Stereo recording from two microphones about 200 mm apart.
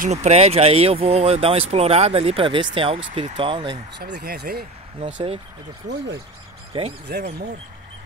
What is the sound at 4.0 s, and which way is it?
Speech, 55° right (ahead or behind).